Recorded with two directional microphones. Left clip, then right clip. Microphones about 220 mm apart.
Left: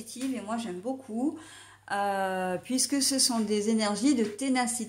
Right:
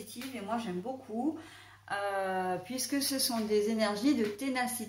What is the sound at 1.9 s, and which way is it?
Speech, 50° left (ahead or behind).